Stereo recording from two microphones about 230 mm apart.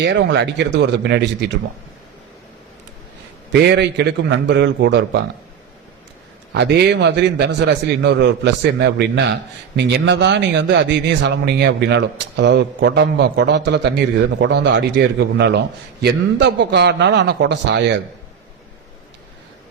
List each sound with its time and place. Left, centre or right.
0.0 s a man's voice: right
3.5 s a man's voice: right
6.5 s a man's voice: right